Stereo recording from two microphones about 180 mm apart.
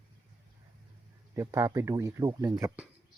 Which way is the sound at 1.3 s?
15° right (ahead or behind).